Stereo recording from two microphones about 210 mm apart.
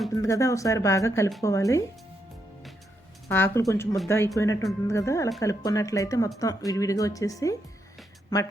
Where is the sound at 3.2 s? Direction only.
10° left (ahead or behind).